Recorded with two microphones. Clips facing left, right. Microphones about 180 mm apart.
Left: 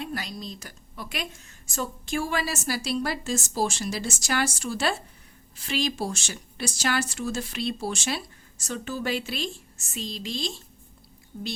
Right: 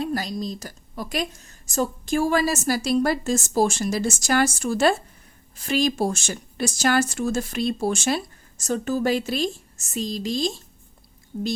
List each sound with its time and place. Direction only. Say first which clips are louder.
0.0 s speech: right 8 dB; 40° right (ahead or behind)